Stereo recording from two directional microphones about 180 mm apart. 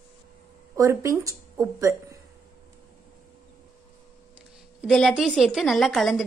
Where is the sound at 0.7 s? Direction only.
15° right (ahead or behind).